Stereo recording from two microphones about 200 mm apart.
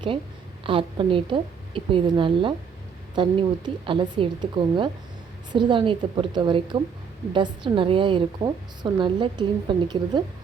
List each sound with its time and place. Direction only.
0.6 s a woman's voice: 25° right (ahead or behind)